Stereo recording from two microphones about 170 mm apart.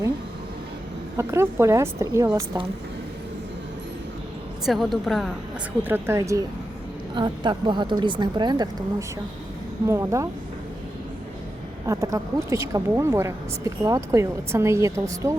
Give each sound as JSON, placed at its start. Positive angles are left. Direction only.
{"t": 1.1, "sound": "speech", "side_deg": -15}
{"t": 4.6, "sound": "a woman's voice", "side_deg": 0}
{"t": 5.9, "sound": "a woman's voice", "side_deg": -15}
{"t": 11.9, "sound": "speech", "side_deg": -20}